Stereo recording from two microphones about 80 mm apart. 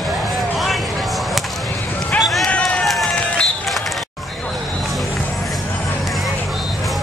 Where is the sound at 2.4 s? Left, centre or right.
Centre.